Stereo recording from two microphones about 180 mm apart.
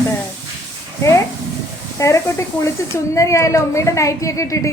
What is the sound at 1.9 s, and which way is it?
A woman's voice, 15° left (ahead or behind).